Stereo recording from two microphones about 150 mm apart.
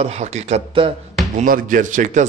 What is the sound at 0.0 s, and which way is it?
Speech, 50° right (ahead or behind).